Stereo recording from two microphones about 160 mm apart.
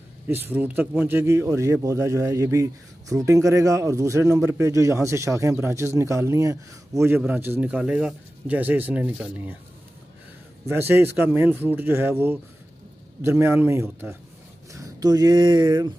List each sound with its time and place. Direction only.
0.3 s speech: 10° right (ahead or behind)
10.7 s speech: 15° right (ahead or behind)